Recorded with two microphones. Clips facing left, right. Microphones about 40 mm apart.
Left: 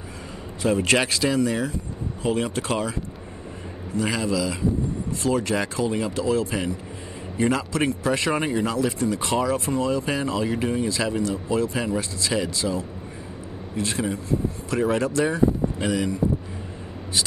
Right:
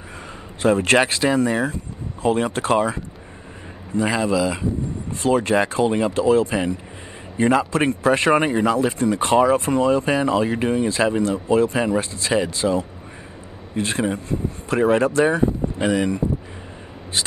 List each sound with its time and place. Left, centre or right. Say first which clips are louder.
0.6 s speech: right 4 dB; right